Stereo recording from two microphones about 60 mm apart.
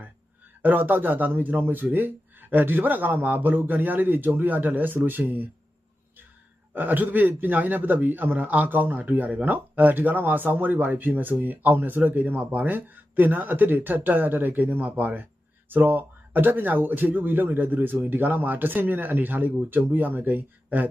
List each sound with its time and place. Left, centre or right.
0.6 s a man's voice: right
6.7 s a man's voice: right